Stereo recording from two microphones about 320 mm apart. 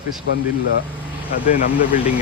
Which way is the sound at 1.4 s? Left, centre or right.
Left.